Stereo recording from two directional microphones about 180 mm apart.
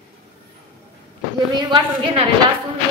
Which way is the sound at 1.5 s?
25° right (ahead or behind).